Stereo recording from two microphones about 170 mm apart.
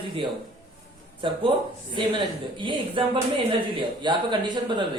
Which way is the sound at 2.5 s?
30° right (ahead or behind).